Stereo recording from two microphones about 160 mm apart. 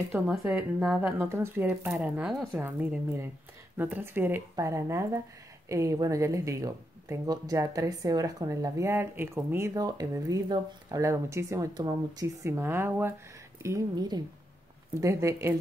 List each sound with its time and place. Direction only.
0.1 s speech: 5° right (ahead or behind)